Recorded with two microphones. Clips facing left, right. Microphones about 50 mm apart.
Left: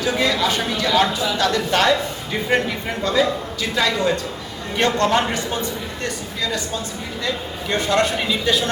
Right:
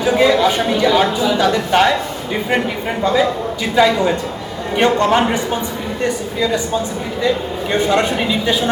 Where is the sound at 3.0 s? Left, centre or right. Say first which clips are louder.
Right 4 dB; centre.